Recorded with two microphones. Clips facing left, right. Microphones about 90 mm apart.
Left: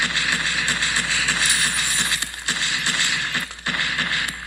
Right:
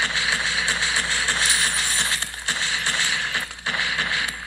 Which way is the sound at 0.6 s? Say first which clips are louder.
Even; centre (ahead or behind).